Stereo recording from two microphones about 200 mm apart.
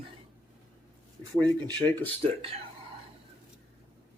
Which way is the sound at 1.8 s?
25° right (ahead or behind).